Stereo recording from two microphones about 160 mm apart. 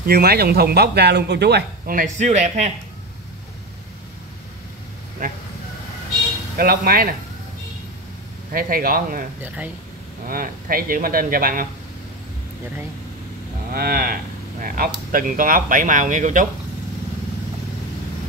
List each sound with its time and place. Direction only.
0.0 s speech: 80° right; by 2.7 s 45° right (ahead or behind)
6.6 s speech: 65° right (ahead or behind)
8.5 s speech: 65° right (ahead or behind)
10.2 s speech: 65° right (ahead or behind)
13.7 s speech: 70° right (ahead or behind); by 16.4 s 50° right (ahead or behind)